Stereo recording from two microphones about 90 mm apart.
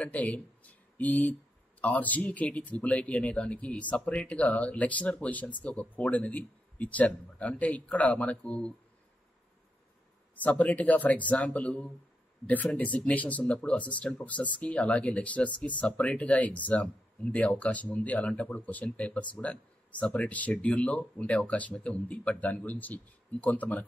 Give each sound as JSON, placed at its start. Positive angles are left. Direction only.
{"t": 0.0, "sound": "speech", "side_deg": 15}
{"t": 10.3, "sound": "speech", "side_deg": 15}